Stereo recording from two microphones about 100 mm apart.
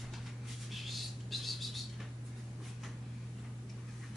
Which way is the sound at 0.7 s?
Centre (ahead or behind).